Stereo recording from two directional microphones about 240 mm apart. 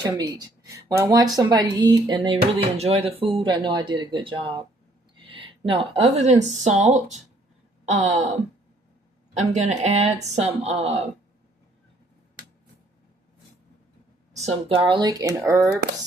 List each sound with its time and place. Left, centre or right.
0.0 s speech: centre
9.3 s speech: right
14.3 s speech: right